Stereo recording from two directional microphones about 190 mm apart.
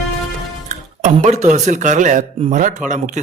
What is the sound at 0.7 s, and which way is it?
Speech, 40° right (ahead or behind).